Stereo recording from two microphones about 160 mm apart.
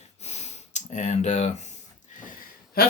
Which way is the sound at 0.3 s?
45° left (ahead or behind).